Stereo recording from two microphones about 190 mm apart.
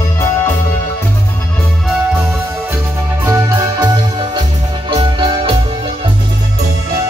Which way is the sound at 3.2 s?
15° right (ahead or behind).